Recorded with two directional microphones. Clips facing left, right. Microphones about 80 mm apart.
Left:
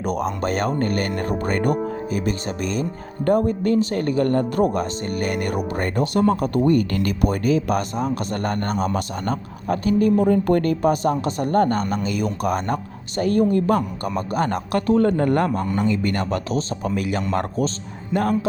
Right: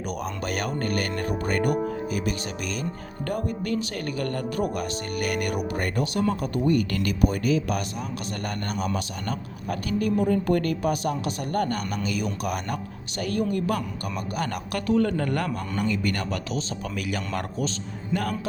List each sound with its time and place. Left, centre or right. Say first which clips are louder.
0.0 s a man's voice: left 7 dB; left